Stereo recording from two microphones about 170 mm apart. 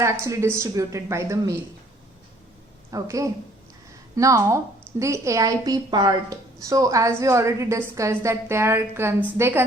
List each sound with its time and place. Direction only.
0.0 s a woman's voice: 15° right (ahead or behind)
2.9 s a woman's voice: 20° right (ahead or behind)